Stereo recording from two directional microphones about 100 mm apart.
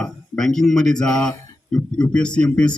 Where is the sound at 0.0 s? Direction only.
5° left (ahead or behind).